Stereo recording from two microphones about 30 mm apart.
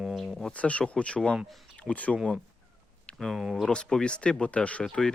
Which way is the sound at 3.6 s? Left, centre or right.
Left.